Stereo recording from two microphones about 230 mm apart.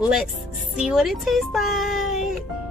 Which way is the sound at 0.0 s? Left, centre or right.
Centre.